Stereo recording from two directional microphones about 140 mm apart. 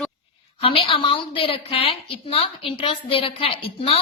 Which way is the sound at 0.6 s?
45° left (ahead or behind).